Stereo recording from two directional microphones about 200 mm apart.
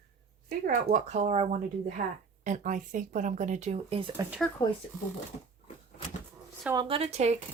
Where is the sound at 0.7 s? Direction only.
40° right (ahead or behind).